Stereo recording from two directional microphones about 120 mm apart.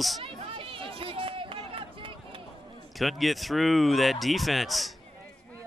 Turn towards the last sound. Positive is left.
turn(degrees=0)  # may be behind; listen again after turning